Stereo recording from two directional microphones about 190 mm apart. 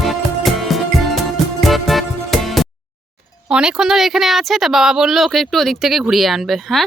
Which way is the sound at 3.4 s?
5° right (ahead or behind).